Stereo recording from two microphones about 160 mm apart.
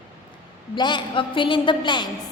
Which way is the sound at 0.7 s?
30° left (ahead or behind).